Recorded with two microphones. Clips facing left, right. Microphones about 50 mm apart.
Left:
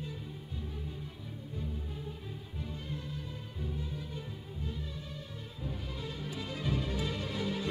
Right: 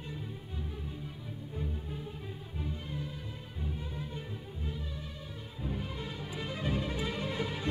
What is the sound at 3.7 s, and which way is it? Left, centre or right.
Music, right.